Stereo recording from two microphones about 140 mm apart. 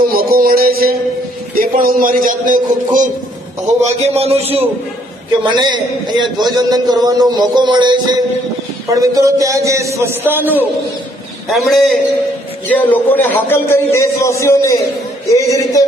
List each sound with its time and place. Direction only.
0.0 s a sound: 90° right
1.6 s a man's voice: 90° right; by 3.1 s 70° right (ahead or behind)
3.8 s a man's voice: 50° right (ahead or behind)
5.5 s a man's voice: 35° right (ahead or behind)
6.5 s a sound: 30° right (ahead or behind)
10.3 s a man's voice: 15° right (ahead or behind)
11.5 s a man's voice: centre (ahead or behind)
12.6 s a man's voice: 10° left (ahead or behind)